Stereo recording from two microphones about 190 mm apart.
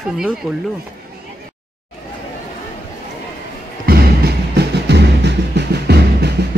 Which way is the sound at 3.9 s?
60° right (ahead or behind).